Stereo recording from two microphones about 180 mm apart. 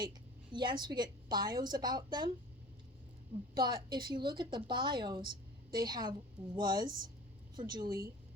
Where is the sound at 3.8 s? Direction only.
25° right (ahead or behind).